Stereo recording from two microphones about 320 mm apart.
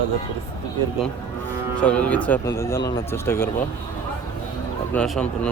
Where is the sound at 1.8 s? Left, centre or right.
Centre.